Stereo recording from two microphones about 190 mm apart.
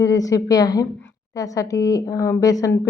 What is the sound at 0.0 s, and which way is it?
A woman's voice, 15° left (ahead or behind).